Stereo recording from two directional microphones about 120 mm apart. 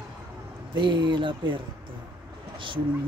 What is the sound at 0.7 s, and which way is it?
Speech, 40° right (ahead or behind).